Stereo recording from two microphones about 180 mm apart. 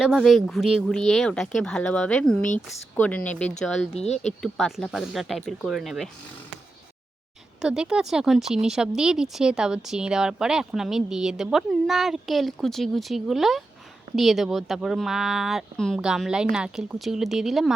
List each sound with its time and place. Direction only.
0.0 s speech: centre (ahead or behind)
3.9 s speech: 35° left (ahead or behind)
4.5 s speech: centre (ahead or behind)
7.6 s speech: 5° right (ahead or behind)